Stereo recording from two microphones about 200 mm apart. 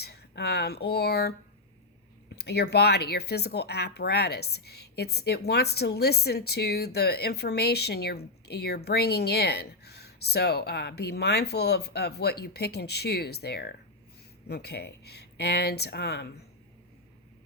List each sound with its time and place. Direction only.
0.0 s speech: 55° left (ahead or behind)
2.3 s speech: 55° left (ahead or behind)